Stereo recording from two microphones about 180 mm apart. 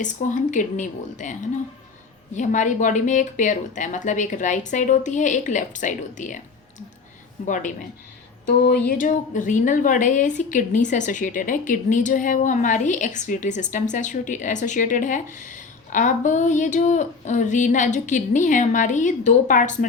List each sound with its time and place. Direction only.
0.0 s a woman's voice: 45° left (ahead or behind)
8.4 s a sound: 65° left (ahead or behind)
8.9 s a woman's voice: 45° left (ahead or behind)